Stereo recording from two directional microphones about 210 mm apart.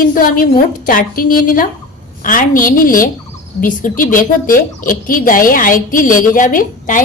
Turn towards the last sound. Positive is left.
turn(degrees=40)  # may be behind; listen again after turning